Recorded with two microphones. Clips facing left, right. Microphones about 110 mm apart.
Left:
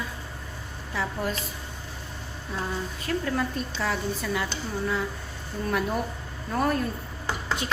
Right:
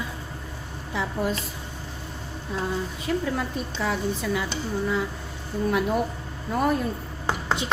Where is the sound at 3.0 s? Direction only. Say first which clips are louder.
Even; 10° right (ahead or behind).